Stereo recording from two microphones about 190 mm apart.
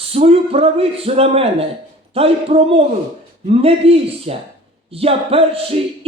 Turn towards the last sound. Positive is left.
turn(degrees=-30)  # may be behind; listen again after turning